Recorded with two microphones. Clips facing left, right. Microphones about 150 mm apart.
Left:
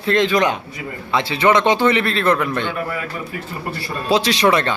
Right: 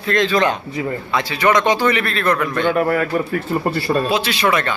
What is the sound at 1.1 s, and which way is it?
A man's voice, 25° left (ahead or behind).